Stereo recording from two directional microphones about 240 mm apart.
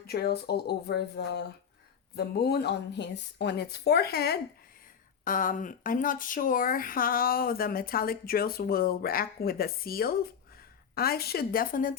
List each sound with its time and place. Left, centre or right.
0.0 s speech: left